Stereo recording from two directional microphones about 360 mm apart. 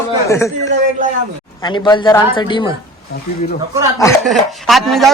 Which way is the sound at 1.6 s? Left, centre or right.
Centre.